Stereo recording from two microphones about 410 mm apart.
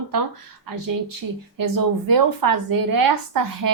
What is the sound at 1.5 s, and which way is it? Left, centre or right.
Speech, right.